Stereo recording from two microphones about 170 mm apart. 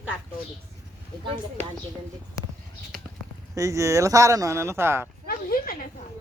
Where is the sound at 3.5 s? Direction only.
20° right (ahead or behind).